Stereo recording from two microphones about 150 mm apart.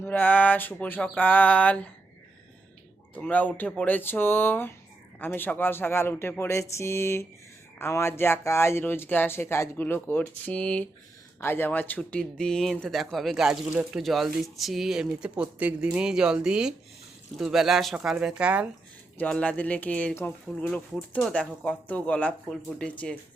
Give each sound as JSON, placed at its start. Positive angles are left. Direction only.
{"t": 0.0, "sound": "speech", "side_deg": 10}
{"t": 3.2, "sound": "speech", "side_deg": 10}
{"t": 19.1, "sound": "speech", "side_deg": 10}